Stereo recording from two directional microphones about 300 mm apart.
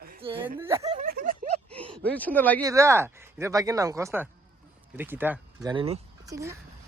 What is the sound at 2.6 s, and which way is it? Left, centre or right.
Speech, centre.